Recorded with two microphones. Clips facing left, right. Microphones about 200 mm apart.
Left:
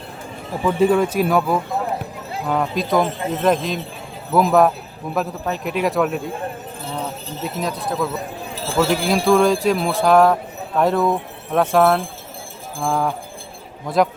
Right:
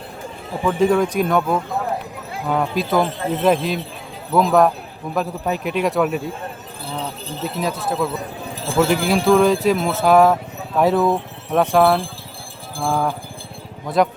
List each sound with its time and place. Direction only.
0.6 s a man's voice: 5° left (ahead or behind)
7.4 s a man's voice: 5° right (ahead or behind)
8.5 s a sound: 15° right (ahead or behind)
8.9 s a man's voice: centre (ahead or behind)